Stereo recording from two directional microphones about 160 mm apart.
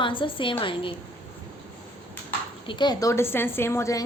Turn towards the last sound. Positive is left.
turn(degrees=20)  # may be behind; listen again after turning